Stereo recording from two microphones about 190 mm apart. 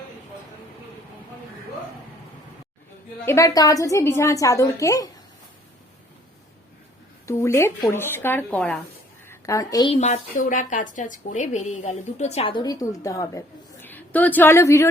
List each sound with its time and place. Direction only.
3.2 s a woman's voice: 15° left (ahead or behind)
7.3 s a woman's voice: 15° left (ahead or behind)
9.9 s speech: 40° left (ahead or behind); by 14.8 s 15° left (ahead or behind)